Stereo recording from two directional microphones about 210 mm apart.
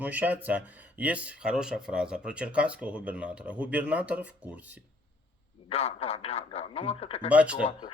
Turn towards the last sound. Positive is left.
turn(degrees=-5)  # may be behind; listen again after turning